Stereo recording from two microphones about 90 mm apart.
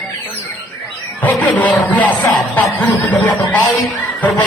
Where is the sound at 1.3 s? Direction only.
10° left (ahead or behind).